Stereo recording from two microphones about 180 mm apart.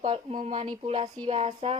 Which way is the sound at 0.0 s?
35° right (ahead or behind).